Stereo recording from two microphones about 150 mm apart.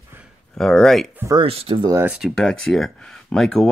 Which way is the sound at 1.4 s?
40° right (ahead or behind).